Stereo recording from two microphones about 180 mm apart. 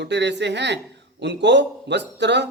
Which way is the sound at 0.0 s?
75° right (ahead or behind).